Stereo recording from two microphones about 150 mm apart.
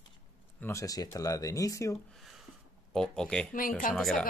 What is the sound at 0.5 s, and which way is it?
Speech, 15° left (ahead or behind).